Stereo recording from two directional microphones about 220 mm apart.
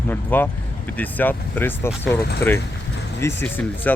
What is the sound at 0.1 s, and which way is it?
Speech, 10° left (ahead or behind).